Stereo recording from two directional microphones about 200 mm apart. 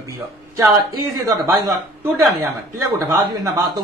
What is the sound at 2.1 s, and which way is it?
Speech, 10° right (ahead or behind).